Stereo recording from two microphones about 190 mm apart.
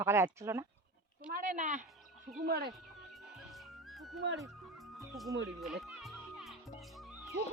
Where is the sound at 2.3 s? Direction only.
55° right (ahead or behind).